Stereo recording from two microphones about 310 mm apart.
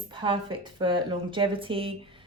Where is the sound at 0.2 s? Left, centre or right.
Centre.